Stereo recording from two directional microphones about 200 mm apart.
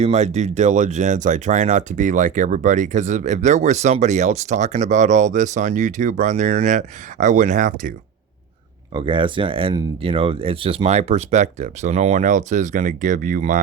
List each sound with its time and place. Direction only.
0.0 s speech: 35° right (ahead or behind)
8.9 s speech: 25° right (ahead or behind); by 13.6 s 40° right (ahead or behind)